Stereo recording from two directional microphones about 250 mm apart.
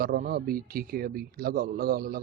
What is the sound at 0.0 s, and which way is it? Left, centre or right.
Speech, right.